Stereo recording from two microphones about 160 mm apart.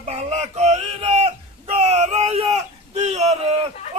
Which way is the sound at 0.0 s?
45° right (ahead or behind).